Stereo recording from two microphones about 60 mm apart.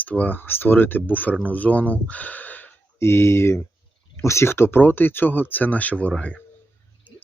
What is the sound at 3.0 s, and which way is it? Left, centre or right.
Speech, left.